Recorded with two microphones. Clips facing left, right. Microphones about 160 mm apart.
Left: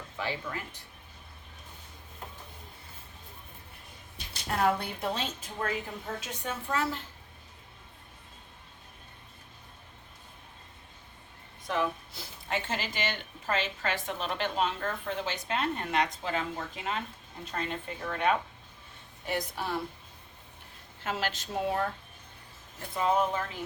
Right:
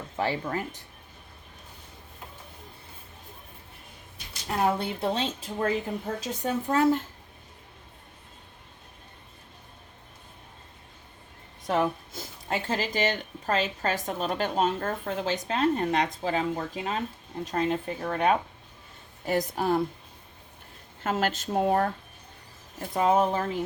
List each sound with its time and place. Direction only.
0.2 s speech: 45° right (ahead or behind)
4.6 s speech: 30° right (ahead or behind); by 7.0 s 45° right (ahead or behind)
11.6 s speech: 45° right (ahead or behind)
21.0 s speech: 50° right (ahead or behind)
23.0 s speech: 45° right (ahead or behind)